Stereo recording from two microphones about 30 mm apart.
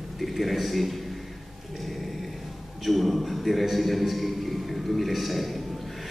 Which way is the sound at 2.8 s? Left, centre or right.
Centre.